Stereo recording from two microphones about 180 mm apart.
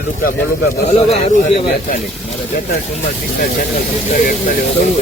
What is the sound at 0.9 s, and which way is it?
Speech, 40° left (ahead or behind).